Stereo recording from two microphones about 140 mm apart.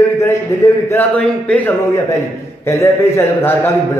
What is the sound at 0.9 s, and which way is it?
Speech, 10° left (ahead or behind).